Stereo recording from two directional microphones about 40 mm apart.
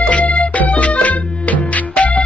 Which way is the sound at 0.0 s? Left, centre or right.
Left.